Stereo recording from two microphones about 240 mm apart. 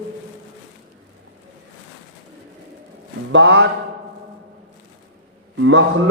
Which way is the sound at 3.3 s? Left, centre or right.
Right.